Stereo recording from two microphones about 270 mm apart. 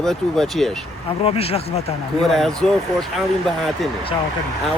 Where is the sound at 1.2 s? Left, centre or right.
Left.